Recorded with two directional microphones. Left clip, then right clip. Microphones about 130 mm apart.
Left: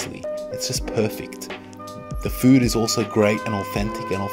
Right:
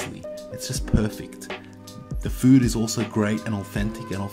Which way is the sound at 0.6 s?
35° left (ahead or behind).